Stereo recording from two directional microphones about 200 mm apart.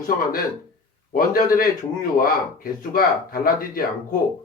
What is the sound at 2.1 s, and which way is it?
Speech, 45° left (ahead or behind).